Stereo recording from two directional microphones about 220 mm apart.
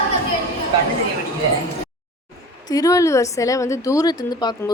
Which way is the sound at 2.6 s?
15° left (ahead or behind).